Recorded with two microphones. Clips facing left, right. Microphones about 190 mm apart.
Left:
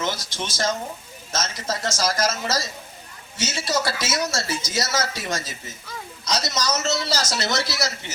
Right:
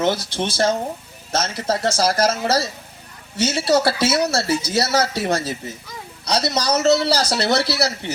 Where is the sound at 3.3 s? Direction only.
60° right (ahead or behind).